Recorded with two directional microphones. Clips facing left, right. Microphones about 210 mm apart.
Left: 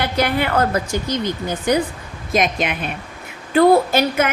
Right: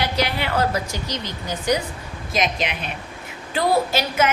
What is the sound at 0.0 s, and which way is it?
A woman's voice, 55° left (ahead or behind).